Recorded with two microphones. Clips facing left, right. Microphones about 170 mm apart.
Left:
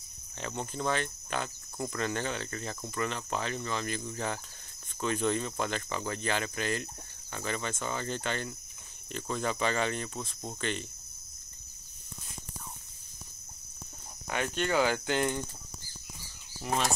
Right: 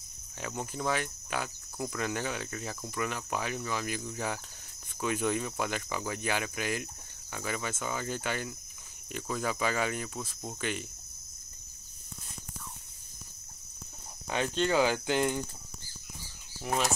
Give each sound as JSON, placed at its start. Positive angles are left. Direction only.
{"t": 0.4, "sound": "speech", "side_deg": -5}
{"t": 14.6, "sound": "speech", "side_deg": -15}
{"t": 16.6, "sound": "speech", "side_deg": -5}